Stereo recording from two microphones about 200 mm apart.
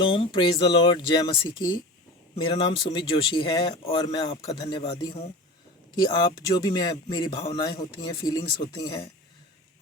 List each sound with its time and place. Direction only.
0.0 s speech: 25° left (ahead or behind)
6.7 s speech: 20° left (ahead or behind)